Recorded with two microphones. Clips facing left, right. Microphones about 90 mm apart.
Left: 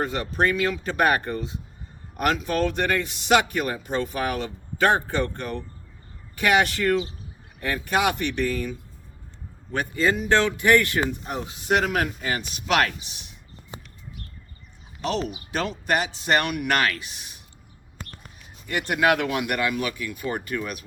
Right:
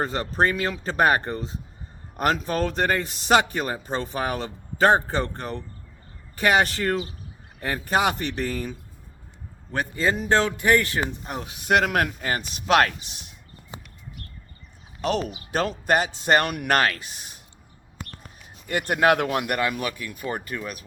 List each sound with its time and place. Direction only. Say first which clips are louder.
0.0 s speech: right 1 dB; 35° right (ahead or behind)
9.7 s speech: left 1 dB; 40° right (ahead or behind)
11.6 s speech: right 2 dB; 55° right (ahead or behind); by 12.9 s 40° right (ahead or behind)
15.5 s speech: right 3 dB; 40° right (ahead or behind)
18.7 s speech: right 1 dB; 40° right (ahead or behind)